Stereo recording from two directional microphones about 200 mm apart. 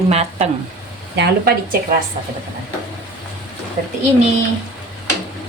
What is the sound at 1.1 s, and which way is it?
Speech, 50° right (ahead or behind).